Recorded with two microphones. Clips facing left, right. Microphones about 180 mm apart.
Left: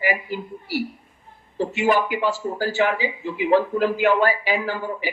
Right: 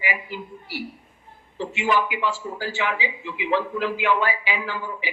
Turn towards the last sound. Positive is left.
turn(degrees=40)  # may be behind; listen again after turning